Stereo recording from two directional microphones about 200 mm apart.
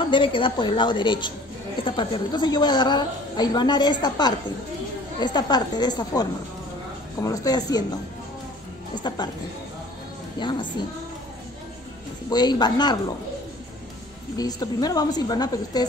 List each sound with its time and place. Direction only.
0.0 s a woman's voice: 25° left (ahead or behind)
8.9 s a woman's voice: 20° left (ahead or behind)
10.4 s a woman's voice: 25° left (ahead or behind)
12.3 s a woman's voice: 20° left (ahead or behind)
14.3 s a woman's voice: 20° left (ahead or behind)